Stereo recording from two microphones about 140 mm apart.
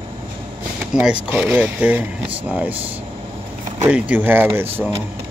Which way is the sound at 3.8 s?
10° right (ahead or behind).